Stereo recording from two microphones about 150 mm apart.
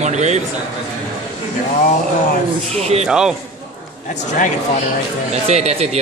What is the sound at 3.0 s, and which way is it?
Speech, 5° right (ahead or behind).